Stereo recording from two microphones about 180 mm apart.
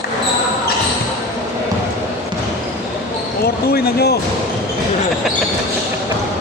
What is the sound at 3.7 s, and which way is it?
Music, 60° left (ahead or behind).